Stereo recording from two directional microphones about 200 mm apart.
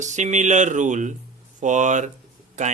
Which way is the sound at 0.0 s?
35° right (ahead or behind).